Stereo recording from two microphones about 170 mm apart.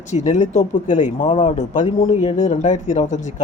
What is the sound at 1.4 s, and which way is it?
Speech, 45° left (ahead or behind).